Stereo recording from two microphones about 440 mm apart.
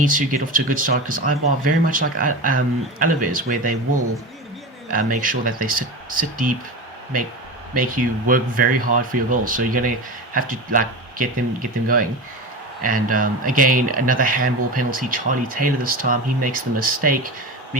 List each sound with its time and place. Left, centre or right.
0.0 s speech: centre
4.9 s speech: centre
7.8 s speech: centre